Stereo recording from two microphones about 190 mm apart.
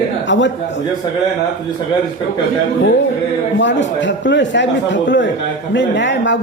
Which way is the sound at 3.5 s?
70° left (ahead or behind).